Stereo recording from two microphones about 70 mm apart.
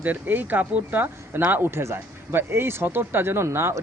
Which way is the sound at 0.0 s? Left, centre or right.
Right.